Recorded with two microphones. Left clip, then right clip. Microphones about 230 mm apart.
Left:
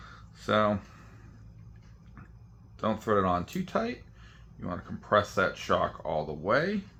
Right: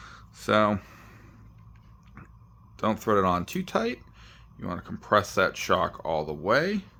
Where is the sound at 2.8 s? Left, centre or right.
Right.